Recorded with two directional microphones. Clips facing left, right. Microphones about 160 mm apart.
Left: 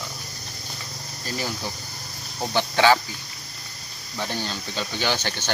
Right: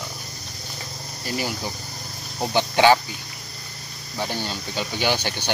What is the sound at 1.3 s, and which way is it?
Speech, 10° right (ahead or behind).